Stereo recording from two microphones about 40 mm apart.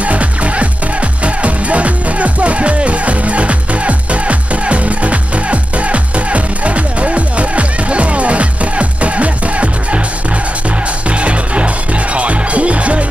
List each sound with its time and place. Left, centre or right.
0.0 s music: right
11.1 s music: right